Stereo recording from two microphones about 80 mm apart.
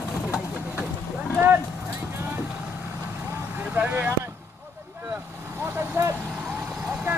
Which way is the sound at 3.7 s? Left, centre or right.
Centre.